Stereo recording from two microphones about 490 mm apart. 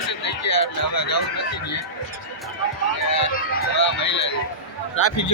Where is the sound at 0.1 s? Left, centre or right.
Left.